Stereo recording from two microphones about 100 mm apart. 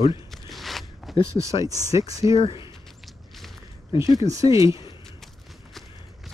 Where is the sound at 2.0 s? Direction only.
35° right (ahead or behind).